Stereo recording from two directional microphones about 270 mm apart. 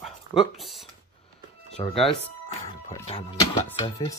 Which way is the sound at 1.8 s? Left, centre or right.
Centre.